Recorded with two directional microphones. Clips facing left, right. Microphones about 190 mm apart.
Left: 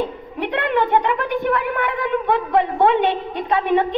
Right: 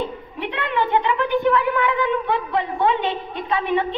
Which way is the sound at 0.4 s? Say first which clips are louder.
Left 4 dB; 50° left (ahead or behind).